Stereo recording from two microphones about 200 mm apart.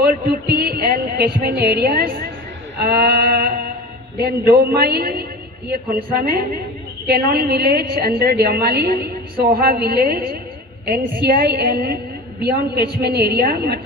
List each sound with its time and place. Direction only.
0.0 s a woman's voice: 50° right (ahead or behind)